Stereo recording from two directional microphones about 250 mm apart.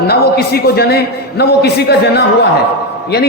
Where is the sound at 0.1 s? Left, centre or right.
Left.